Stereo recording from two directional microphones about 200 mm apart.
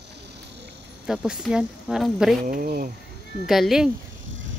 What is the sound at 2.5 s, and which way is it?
Speech, 45° right (ahead or behind).